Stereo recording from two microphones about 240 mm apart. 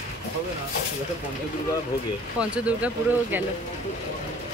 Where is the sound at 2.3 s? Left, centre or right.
Centre.